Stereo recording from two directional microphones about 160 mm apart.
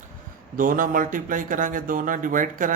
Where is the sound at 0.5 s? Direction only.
60° right (ahead or behind).